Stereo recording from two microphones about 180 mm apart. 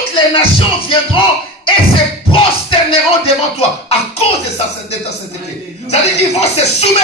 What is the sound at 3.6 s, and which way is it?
Speech, 35° left (ahead or behind).